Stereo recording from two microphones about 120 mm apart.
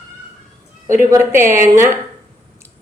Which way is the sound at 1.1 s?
20° right (ahead or behind).